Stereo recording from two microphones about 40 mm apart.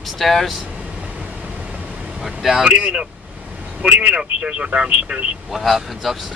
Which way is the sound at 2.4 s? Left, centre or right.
Centre.